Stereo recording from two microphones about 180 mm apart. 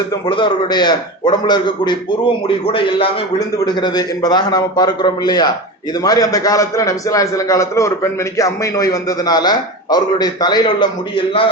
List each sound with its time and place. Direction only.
0.1 s a man's voice: 25° left (ahead or behind)